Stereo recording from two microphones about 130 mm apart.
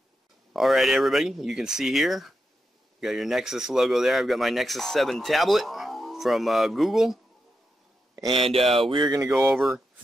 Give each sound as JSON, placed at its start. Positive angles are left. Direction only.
{"t": 0.5, "sound": "speech", "side_deg": 0}
{"t": 8.2, "sound": "speech", "side_deg": -40}
{"t": 8.6, "sound": "speech", "side_deg": 0}
{"t": 8.9, "sound": "a sound", "side_deg": -30}
{"t": 9.3, "sound": "speech", "side_deg": 0}